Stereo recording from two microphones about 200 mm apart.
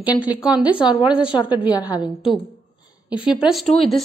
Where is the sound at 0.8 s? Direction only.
25° left (ahead or behind).